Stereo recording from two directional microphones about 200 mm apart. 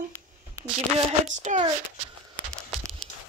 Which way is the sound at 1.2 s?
35° right (ahead or behind).